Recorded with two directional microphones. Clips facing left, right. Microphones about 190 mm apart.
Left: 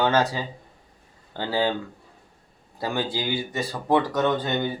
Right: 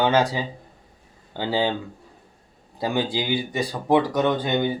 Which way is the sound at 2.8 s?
15° right (ahead or behind).